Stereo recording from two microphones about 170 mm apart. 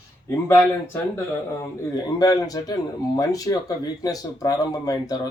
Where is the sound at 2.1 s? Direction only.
20° left (ahead or behind).